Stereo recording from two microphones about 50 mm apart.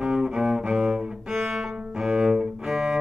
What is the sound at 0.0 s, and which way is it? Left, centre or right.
Cello, centre.